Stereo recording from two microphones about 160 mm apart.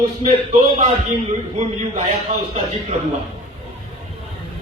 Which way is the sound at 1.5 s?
45° right (ahead or behind).